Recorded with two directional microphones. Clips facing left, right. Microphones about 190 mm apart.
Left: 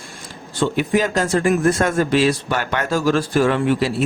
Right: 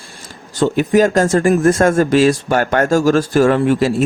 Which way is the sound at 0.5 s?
40° right (ahead or behind).